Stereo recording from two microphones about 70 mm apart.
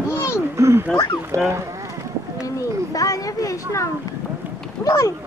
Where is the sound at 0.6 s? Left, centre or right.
Right.